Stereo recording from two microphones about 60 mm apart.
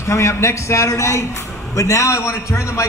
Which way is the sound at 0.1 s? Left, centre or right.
Left.